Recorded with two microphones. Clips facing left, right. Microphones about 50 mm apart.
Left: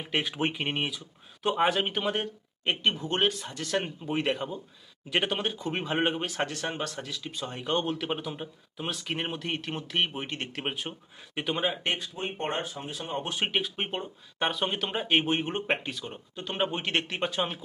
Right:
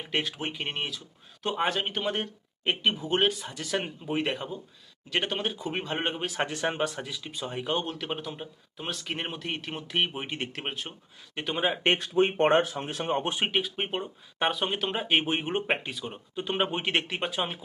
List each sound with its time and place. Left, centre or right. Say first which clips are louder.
0.0 s speech: left 2 dB; centre
6.5 s speech: right 4 dB; centre
11.5 s speech: right 3 dB; centre
12.1 s speech: right 10 dB; right
13.1 s speech: right 5 dB; right
13.3 s speech: right 1 dB; centre
16.9 s speech: even; centre